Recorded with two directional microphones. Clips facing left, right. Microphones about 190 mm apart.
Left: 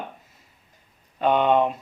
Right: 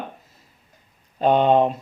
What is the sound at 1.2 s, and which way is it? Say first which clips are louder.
Speech: right 3 dB; 35° right (ahead or behind).